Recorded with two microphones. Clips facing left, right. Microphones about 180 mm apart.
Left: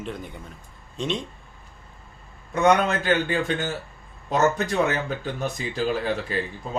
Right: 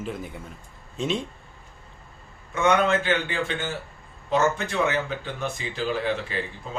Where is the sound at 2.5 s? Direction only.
40° left (ahead or behind).